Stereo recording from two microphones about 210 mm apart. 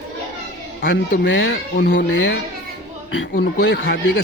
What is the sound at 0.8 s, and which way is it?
Speech, 55° left (ahead or behind).